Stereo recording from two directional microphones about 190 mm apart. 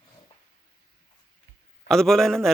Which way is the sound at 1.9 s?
Centre (ahead or behind).